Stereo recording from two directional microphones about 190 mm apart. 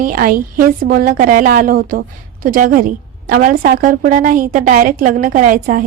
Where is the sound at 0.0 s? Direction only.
45° right (ahead or behind).